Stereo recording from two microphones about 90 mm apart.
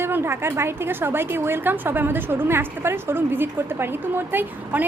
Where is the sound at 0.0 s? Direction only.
25° right (ahead or behind).